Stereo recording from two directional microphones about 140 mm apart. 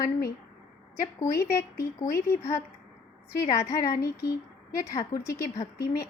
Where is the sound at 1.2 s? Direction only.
20° left (ahead or behind).